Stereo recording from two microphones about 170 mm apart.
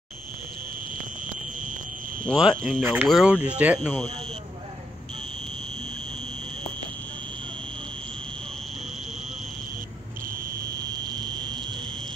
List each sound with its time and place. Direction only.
2.2 s speech: centre (ahead or behind)
11.1 s fire alarm: 25° right (ahead or behind)